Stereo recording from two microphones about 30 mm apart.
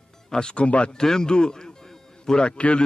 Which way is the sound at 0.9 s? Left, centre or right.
Left.